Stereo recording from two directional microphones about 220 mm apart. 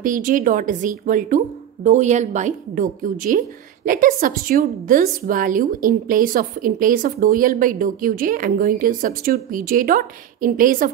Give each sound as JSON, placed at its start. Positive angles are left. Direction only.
{"t": 0.0, "sound": "a woman's voice", "side_deg": -35}